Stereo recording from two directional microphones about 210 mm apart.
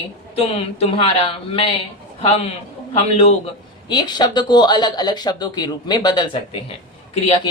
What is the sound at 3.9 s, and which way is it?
Speech, 20° left (ahead or behind).